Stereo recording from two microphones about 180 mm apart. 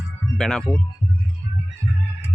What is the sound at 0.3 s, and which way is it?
Speech, 5° left (ahead or behind).